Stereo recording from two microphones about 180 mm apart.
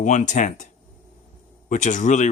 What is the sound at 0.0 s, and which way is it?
Speech, 45° left (ahead or behind).